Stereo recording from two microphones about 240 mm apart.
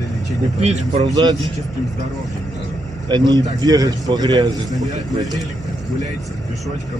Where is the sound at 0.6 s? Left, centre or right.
Right.